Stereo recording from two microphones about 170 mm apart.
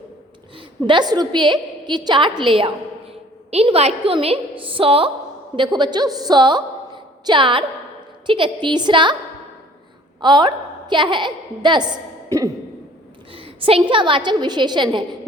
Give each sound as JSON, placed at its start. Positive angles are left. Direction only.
{"t": 0.5, "sound": "a woman's voice", "side_deg": -25}
{"t": 10.2, "sound": "a woman's voice", "side_deg": -25}
{"t": 13.3, "sound": "a woman's voice", "side_deg": -30}